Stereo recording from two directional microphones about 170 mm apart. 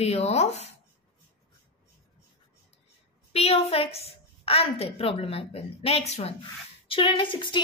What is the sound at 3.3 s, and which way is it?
A woman's voice, 35° left (ahead or behind).